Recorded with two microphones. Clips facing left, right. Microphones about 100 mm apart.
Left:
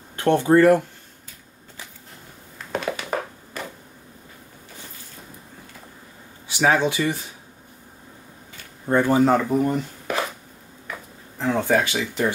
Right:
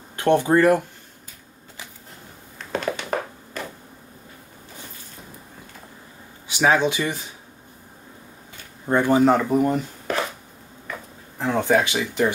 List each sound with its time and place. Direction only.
0.1 s speech: 15° right (ahead or behind)
2.6 s a sound: 5° left (ahead or behind)
6.4 s speech: 20° right (ahead or behind)
8.8 s speech: 15° right (ahead or behind)
11.3 s speech: 5° right (ahead or behind)
11.6 s speech: 20° right (ahead or behind)